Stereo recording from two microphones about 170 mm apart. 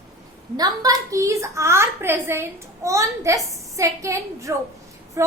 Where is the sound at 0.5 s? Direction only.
20° right (ahead or behind).